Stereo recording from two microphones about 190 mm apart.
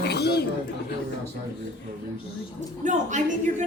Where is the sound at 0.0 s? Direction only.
60° left (ahead or behind).